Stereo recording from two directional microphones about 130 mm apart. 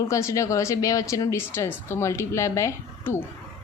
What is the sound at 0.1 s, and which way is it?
A woman's voice, 25° left (ahead or behind).